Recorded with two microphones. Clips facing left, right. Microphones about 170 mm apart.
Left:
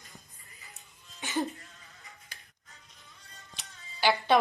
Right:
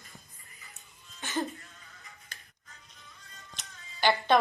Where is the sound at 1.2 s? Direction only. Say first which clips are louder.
Left 1 dB; 15° left (ahead or behind).